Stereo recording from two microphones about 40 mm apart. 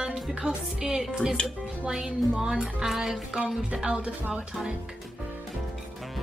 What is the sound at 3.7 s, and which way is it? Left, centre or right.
Music, right.